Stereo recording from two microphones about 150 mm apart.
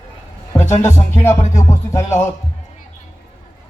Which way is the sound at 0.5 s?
15° left (ahead or behind).